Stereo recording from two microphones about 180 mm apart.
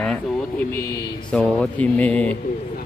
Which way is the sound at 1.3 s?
5° left (ahead or behind).